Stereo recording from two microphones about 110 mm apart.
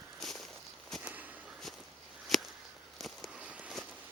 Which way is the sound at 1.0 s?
15° right (ahead or behind).